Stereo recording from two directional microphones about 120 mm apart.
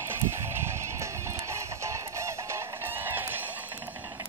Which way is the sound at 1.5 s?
25° right (ahead or behind).